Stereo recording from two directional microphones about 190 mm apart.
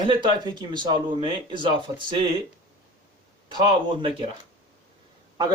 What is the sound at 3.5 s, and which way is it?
Speech, 25° right (ahead or behind).